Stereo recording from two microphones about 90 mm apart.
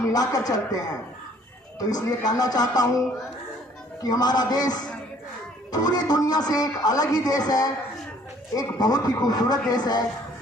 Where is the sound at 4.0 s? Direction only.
45° left (ahead or behind).